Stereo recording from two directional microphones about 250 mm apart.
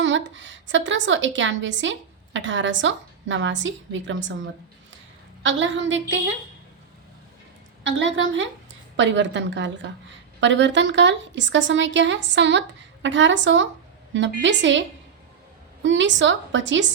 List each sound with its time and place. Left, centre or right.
0.0 s a woman's voice: right
5.4 s a woman's voice: right
7.9 s a woman's voice: right